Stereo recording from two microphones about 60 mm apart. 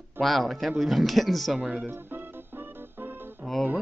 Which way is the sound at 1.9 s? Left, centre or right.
Right.